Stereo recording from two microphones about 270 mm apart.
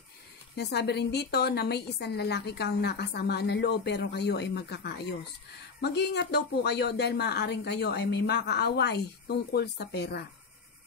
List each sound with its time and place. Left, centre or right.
0.6 s a woman's voice: left